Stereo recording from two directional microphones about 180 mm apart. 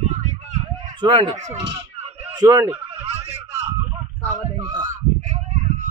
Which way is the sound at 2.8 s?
35° right (ahead or behind).